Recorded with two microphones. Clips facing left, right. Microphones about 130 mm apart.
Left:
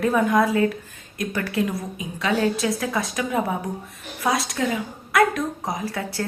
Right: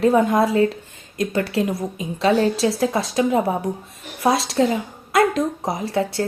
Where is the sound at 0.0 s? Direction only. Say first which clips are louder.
Right 3 dB; 25° right (ahead or behind).